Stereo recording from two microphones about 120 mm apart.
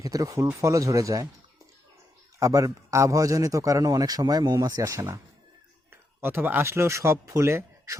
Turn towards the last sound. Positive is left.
turn(degrees=-25)  # may be behind; listen again after turning